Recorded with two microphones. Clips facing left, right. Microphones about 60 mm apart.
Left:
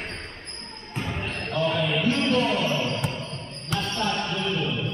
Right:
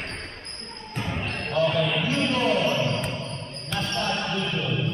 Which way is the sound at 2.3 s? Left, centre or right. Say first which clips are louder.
Right 2 dB; centre.